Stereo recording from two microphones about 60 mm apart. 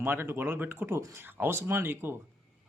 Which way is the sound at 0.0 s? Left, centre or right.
Right.